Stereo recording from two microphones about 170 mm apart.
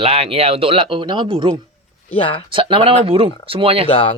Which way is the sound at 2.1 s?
30° left (ahead or behind).